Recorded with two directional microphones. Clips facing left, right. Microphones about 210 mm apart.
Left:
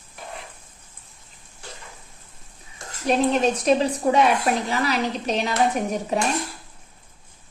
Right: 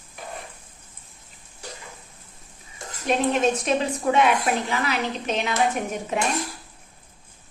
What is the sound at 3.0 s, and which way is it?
Speech, 35° left (ahead or behind).